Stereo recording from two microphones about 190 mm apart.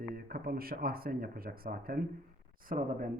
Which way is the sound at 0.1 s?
50° right (ahead or behind).